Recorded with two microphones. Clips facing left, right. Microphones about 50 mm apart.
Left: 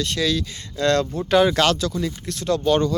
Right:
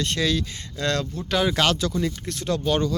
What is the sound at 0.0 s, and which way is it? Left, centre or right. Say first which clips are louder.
Speech: left 1 dB; right.